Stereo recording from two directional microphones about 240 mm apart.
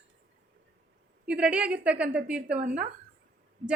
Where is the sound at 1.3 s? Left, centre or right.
Centre.